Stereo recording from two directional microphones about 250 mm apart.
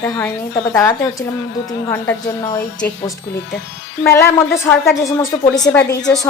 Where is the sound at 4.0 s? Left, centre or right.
Centre.